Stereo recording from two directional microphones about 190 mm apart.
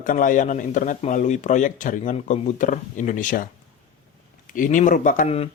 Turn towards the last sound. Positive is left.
turn(degrees=35)  # may be behind; listen again after turning